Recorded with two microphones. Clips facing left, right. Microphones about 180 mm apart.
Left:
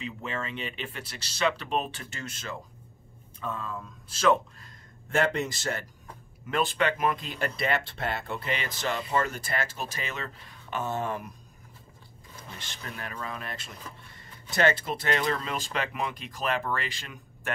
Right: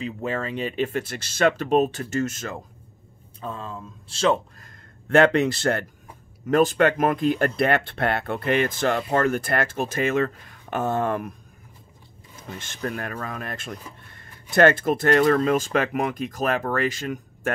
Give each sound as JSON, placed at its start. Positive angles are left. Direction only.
{"t": 0.0, "sound": "speech", "side_deg": -40}
{"t": 3.3, "sound": "speech", "side_deg": -30}
{"t": 5.1, "sound": "speech", "side_deg": -70}
{"t": 6.4, "sound": "speech", "side_deg": -45}
{"t": 12.5, "sound": "speech", "side_deg": -50}